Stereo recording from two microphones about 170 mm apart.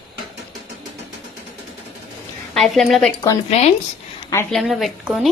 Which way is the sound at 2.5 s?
Centre (ahead or behind).